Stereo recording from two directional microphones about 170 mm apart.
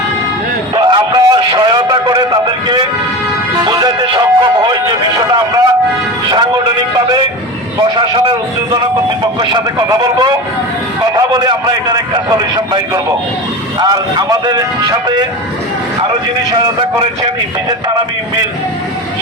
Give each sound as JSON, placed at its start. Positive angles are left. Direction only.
{"t": 0.8, "sound": "music", "side_deg": -25}
{"t": 7.8, "sound": "a sound", "side_deg": -25}
{"t": 9.4, "sound": "a man's voice", "side_deg": -25}